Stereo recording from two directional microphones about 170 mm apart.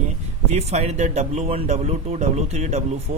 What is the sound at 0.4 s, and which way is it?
Speech, 40° right (ahead or behind).